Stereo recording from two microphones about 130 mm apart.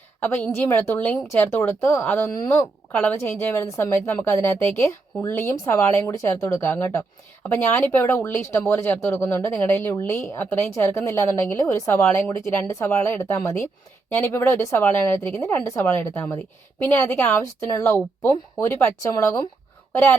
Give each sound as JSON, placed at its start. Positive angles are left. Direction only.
{"t": 0.2, "sound": "a woman's voice", "side_deg": 15}